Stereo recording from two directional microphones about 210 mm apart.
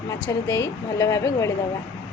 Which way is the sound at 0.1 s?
15° left (ahead or behind).